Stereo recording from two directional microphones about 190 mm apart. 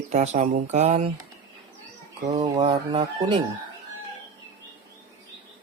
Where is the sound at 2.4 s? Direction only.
20° right (ahead or behind).